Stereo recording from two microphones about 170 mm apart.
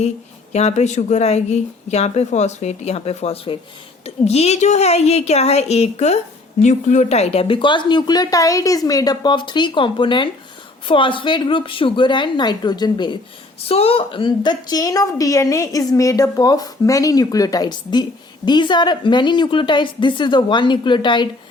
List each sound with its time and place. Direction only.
0.5 s a woman's voice: 40° left (ahead or behind)